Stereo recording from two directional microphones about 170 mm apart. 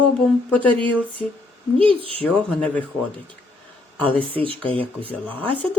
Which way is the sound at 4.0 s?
10° left (ahead or behind).